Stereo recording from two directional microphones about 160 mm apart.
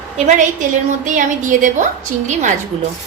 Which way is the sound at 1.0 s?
55° right (ahead or behind).